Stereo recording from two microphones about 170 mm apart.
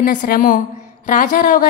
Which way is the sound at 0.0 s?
50° left (ahead or behind).